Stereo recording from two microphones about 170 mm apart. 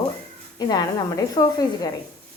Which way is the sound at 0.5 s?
20° left (ahead or behind).